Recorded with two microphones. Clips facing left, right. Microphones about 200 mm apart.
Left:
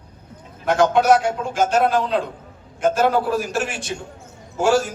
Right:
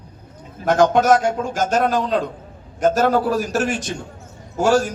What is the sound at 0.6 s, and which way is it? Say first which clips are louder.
A man's voice: right 1 dB; 45° right (ahead or behind).